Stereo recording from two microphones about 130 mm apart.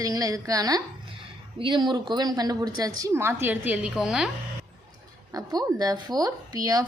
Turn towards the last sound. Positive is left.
turn(degrees=-30)  # may be behind; listen again after turning